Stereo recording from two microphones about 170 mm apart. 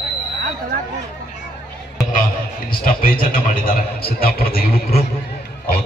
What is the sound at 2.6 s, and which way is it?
A man's voice, 60° left (ahead or behind).